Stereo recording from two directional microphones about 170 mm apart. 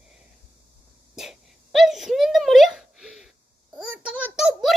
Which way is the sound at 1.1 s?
Centre (ahead or behind).